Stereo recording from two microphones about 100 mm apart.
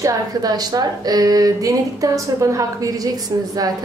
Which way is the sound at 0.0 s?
40° right (ahead or behind).